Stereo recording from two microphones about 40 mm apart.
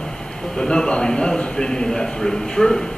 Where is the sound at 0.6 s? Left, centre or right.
Centre.